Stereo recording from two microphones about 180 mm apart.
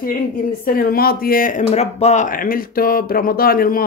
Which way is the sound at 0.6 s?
55° left (ahead or behind).